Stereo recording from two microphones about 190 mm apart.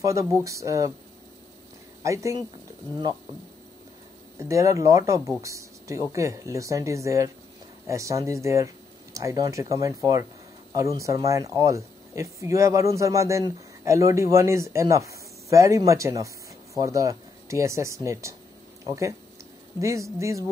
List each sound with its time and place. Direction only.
0.0 s speech: 15° right (ahead or behind)
2.0 s speech: 15° right (ahead or behind)
4.4 s speech: 15° right (ahead or behind)